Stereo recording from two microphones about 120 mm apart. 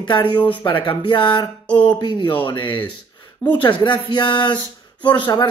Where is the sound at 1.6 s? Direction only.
10° left (ahead or behind).